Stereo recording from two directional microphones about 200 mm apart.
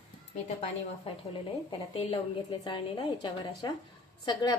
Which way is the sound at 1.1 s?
30° left (ahead or behind).